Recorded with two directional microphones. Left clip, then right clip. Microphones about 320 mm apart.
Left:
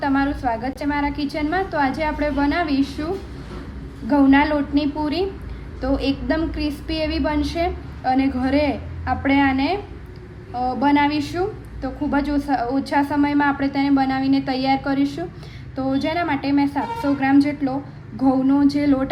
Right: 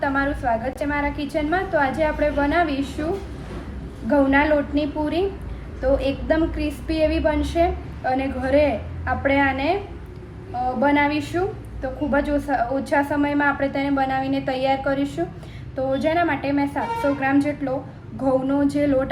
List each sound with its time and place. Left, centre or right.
0.0 s a woman's voice: left